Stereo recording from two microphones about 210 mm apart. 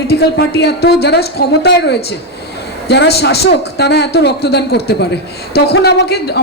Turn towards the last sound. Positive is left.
turn(degrees=50)  # may be behind; listen again after turning